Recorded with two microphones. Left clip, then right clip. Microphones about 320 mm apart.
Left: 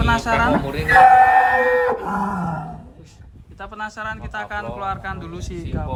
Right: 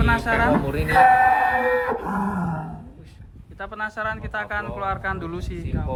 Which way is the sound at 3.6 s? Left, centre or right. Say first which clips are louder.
Right 1 dB; centre.